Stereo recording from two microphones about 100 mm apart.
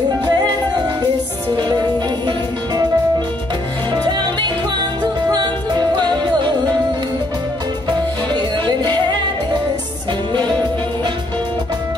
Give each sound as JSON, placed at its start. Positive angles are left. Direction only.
{"t": 0.2, "sound": "music", "side_deg": -45}
{"t": 3.9, "sound": "music", "side_deg": -45}
{"t": 8.3, "sound": "music", "side_deg": -50}